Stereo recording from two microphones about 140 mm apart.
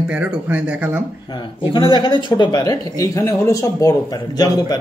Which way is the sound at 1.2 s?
30° left (ahead or behind).